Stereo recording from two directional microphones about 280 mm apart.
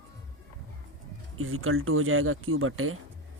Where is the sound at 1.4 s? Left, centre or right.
Right.